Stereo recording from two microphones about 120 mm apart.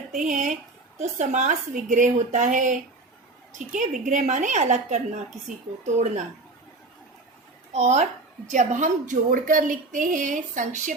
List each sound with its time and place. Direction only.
0.2 s a woman's voice: 90° right
7.7 s speech: 70° right (ahead or behind)
8.4 s a woman's voice: 90° right